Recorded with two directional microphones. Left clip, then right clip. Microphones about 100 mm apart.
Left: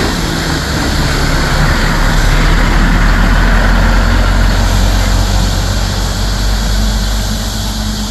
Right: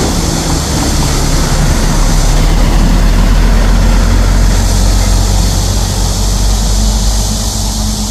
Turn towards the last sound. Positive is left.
turn(degrees=5)  # may be behind; listen again after turning